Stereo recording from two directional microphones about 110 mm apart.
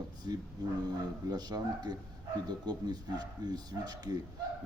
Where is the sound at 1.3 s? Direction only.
40° right (ahead or behind).